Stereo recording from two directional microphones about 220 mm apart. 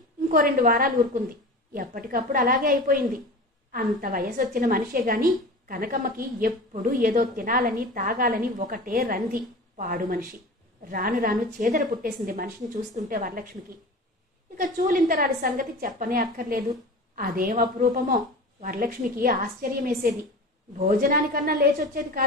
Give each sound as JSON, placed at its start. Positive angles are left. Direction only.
{"t": 0.3, "sound": "a woman's voice", "side_deg": -40}
{"t": 14.6, "sound": "a woman's voice", "side_deg": -40}